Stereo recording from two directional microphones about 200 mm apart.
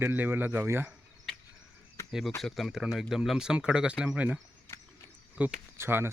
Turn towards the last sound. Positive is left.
turn(degrees=-10)  # may be behind; listen again after turning